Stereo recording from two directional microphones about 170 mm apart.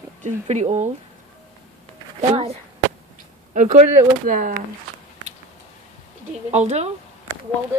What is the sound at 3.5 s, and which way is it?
Speech, 45° right (ahead or behind).